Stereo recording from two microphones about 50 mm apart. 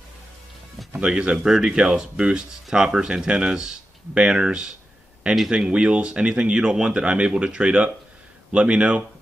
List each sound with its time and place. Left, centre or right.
1.0 s speech: centre